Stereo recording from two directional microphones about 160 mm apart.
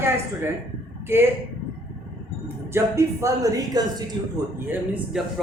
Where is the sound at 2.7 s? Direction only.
20° right (ahead or behind).